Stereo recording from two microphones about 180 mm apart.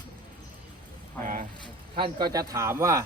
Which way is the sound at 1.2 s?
45° right (ahead or behind).